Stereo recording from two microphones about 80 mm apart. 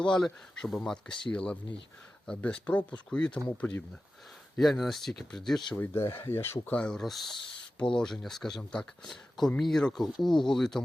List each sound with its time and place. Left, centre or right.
0.0 s speech: centre
1.3 s speech: centre
4.6 s speech: centre
5.7 s speech: left
6.7 s speech: centre
7.0 s speech: centre